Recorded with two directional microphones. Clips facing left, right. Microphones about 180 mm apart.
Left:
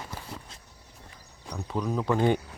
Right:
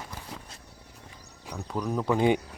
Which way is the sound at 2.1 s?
15° right (ahead or behind).